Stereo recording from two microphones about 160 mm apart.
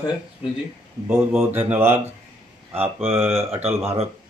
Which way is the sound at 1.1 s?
10° right (ahead or behind).